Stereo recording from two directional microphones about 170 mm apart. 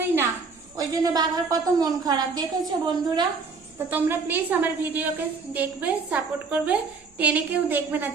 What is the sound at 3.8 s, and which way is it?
A woman's voice, 10° right (ahead or behind).